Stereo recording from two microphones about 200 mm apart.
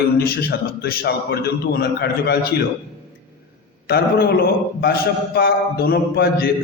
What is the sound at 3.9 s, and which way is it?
A man's voice, 50° left (ahead or behind).